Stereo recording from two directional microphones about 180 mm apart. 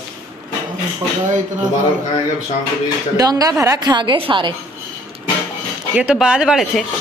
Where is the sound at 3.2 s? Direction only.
20° right (ahead or behind).